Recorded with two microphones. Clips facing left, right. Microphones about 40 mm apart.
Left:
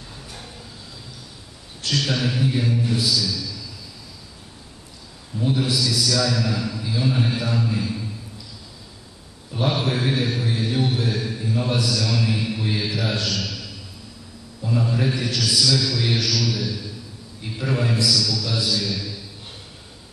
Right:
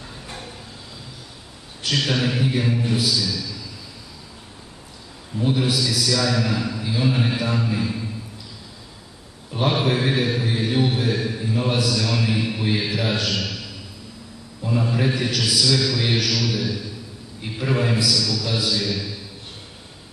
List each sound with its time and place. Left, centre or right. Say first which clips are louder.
1.8 s a man's voice: right 1 dB; centre
5.4 s a man's voice: right 1 dB; centre
9.5 s a man's voice: right 2 dB; centre